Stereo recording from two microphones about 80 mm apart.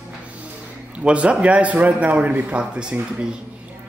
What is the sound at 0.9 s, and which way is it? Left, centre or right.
A man's voice, centre.